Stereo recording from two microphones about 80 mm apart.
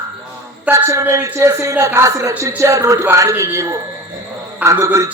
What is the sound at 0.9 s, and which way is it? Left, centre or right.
A man's voice, right.